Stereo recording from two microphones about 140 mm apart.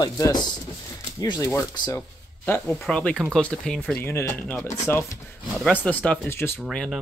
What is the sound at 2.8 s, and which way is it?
Speech, 5° left (ahead or behind).